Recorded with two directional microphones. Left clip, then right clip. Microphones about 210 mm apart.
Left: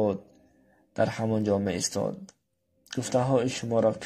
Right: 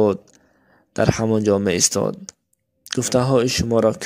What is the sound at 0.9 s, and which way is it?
Speech, 55° right (ahead or behind).